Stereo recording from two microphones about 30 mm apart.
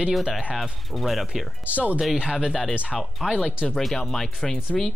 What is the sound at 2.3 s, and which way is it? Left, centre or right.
Speech, centre.